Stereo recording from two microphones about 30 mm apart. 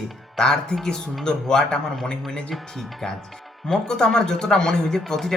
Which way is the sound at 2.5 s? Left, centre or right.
Centre.